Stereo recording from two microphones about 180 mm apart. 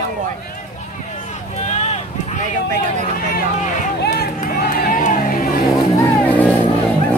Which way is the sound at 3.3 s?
50° left (ahead or behind).